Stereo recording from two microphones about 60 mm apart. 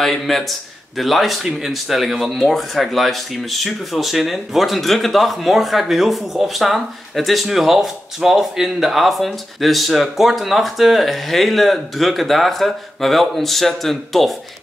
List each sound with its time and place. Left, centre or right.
0.0 s a man's voice: centre